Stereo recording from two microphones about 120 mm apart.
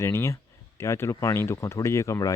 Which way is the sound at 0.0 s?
20° left (ahead or behind).